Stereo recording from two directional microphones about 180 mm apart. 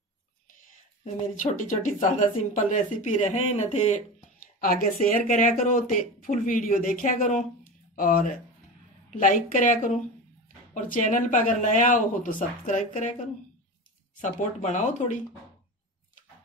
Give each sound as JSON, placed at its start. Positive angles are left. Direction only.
{"t": 1.0, "sound": "speech", "side_deg": 45}
{"t": 4.6, "sound": "speech", "side_deg": 50}